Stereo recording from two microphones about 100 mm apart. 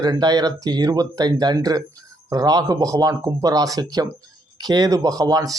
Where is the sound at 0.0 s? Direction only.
40° right (ahead or behind).